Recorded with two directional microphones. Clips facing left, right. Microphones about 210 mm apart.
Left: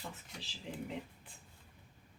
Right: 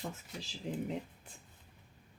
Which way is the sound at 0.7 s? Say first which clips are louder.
Right 6 dB; 40° right (ahead or behind).